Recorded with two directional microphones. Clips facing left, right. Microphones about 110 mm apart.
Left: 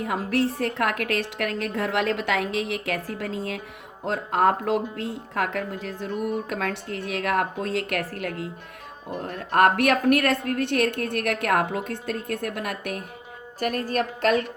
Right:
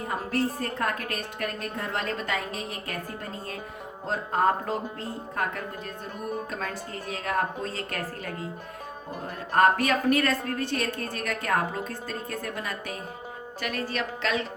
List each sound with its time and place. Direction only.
0.0 s a woman's voice: 85° left
4.0 s a woman's voice: 80° left
13.6 s speech: 45° left (ahead or behind)